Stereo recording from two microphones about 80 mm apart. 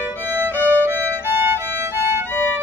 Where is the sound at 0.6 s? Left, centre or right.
Left.